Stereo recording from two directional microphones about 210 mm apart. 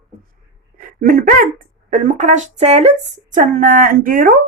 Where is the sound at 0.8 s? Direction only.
40° right (ahead or behind).